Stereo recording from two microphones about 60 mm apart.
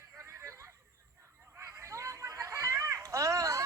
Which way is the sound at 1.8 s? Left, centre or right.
Right.